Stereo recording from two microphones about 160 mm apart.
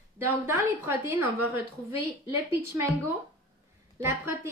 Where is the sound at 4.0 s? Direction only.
15° right (ahead or behind).